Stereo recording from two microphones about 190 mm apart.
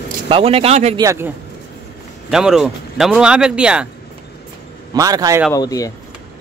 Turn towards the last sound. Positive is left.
turn(degrees=20)  # may be behind; listen again after turning